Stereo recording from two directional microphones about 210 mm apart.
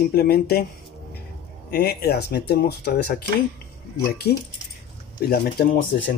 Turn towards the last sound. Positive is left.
turn(degrees=50)  # may be behind; listen again after turning